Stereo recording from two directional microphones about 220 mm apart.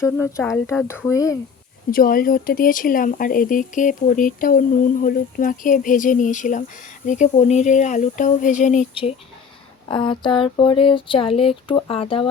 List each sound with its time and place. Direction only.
0.0 s speech: 10° left (ahead or behind)
1.9 s speech: 40° left (ahead or behind)
9.9 s a sound: 20° left (ahead or behind)